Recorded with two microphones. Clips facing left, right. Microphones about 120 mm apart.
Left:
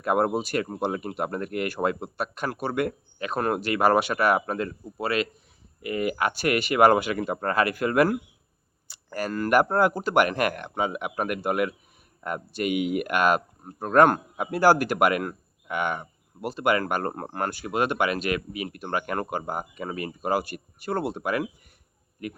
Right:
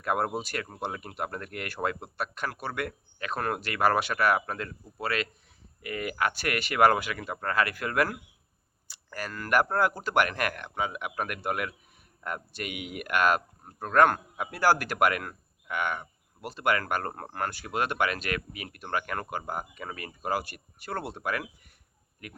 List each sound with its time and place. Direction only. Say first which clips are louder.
0.0 s speech: left 6 dB; 20° left (ahead or behind)
17.5 s speech: left 7 dB; 15° left (ahead or behind)